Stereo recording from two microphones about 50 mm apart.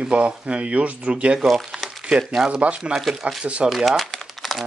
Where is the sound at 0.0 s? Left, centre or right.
Right.